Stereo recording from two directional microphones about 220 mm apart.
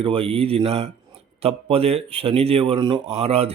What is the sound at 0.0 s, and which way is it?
Speech, 25° right (ahead or behind).